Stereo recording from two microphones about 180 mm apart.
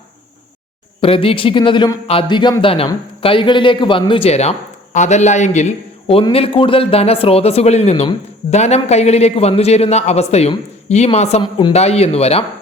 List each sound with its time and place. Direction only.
1.0 s speech: 30° left (ahead or behind)